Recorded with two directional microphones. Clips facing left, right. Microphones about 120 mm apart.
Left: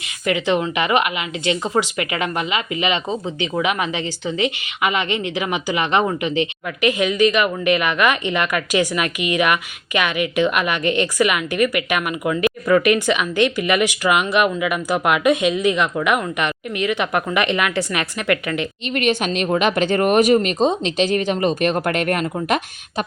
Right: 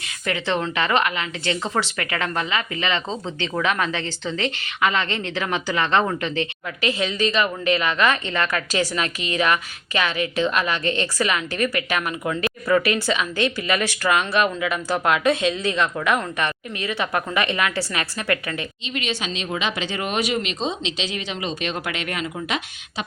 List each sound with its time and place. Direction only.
0.3 s speech: 15° left (ahead or behind)
18.9 s speech: 55° left (ahead or behind)